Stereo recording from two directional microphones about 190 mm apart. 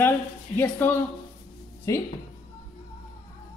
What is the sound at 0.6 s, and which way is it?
A woman's voice, 10° left (ahead or behind).